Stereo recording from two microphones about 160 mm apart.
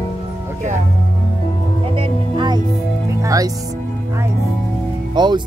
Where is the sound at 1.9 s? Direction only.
30° right (ahead or behind).